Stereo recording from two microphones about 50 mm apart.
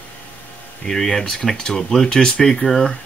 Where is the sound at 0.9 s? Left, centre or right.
Centre.